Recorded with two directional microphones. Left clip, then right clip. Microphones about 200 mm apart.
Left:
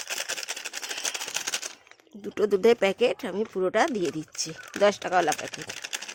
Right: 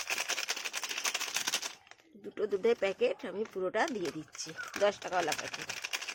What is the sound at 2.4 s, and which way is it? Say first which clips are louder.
Speech: left 9 dB; 60° left (ahead or behind).